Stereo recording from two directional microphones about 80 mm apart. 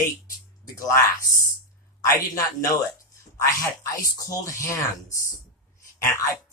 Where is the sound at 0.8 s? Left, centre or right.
Left.